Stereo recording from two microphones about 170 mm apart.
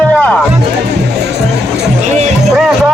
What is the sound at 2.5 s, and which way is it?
Speech, centre (ahead or behind).